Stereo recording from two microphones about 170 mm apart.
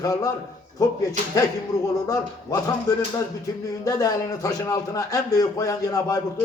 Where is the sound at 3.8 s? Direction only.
20° left (ahead or behind).